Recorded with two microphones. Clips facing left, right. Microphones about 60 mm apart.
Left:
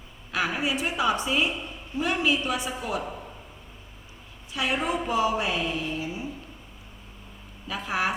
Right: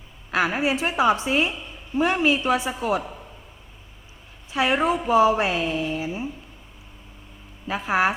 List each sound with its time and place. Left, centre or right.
0.3 s a woman's voice: right
4.5 s a woman's voice: right
7.7 s a woman's voice: right